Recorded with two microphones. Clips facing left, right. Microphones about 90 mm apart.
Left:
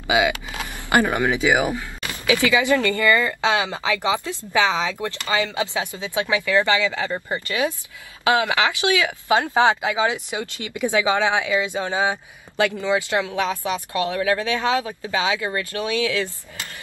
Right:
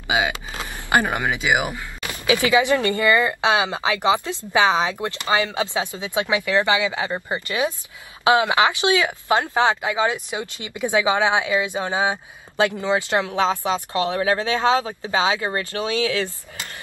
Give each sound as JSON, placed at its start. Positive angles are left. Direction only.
{"t": 0.1, "sound": "speech", "side_deg": -25}
{"t": 9.5, "sound": "speech", "side_deg": 15}
{"t": 10.3, "sound": "speech", "side_deg": -20}